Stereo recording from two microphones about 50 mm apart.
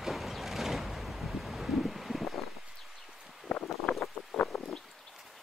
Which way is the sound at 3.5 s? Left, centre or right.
Left.